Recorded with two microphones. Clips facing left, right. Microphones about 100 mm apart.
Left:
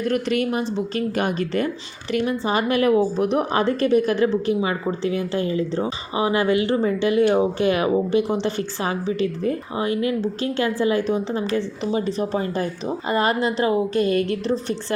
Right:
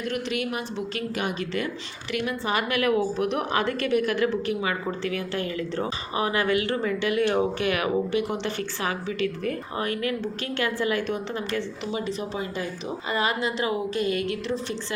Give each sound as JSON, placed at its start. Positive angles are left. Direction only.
{"t": 0.0, "sound": "speech", "side_deg": 45}
{"t": 2.1, "sound": "a woman's voice", "side_deg": 30}